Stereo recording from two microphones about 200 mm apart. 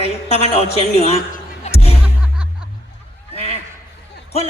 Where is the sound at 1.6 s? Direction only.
30° left (ahead or behind).